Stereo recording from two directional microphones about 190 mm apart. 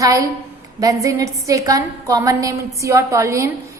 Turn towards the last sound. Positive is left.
turn(degrees=-15)  # may be behind; listen again after turning